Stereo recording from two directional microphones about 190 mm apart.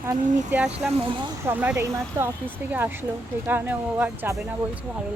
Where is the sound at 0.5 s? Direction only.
10° right (ahead or behind).